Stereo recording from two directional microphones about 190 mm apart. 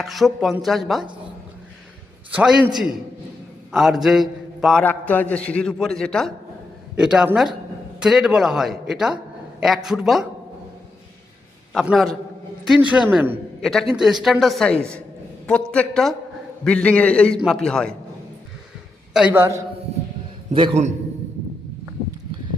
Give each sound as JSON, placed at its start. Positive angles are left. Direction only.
{"t": 0.0, "sound": "a man's voice", "side_deg": 0}
{"t": 2.3, "sound": "a man's voice", "side_deg": -5}
{"t": 11.7, "sound": "a man's voice", "side_deg": 0}
{"t": 19.1, "sound": "a man's voice", "side_deg": -10}
{"t": 20.5, "sound": "a man's voice", "side_deg": -25}